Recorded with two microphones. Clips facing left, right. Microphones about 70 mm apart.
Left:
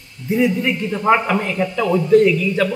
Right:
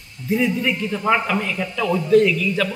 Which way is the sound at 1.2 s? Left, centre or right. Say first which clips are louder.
Left 4 dB; left.